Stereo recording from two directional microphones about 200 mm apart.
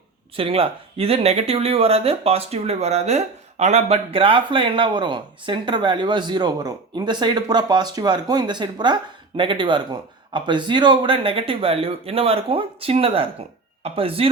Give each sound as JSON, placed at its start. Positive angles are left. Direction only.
{"t": 0.3, "sound": "speech", "side_deg": -30}